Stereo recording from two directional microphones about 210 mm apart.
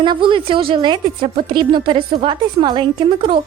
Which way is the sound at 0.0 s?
20° right (ahead or behind).